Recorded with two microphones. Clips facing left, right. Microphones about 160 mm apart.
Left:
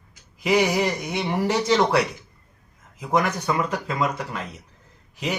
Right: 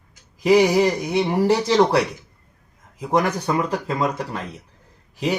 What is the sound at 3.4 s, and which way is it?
Speech, 35° right (ahead or behind).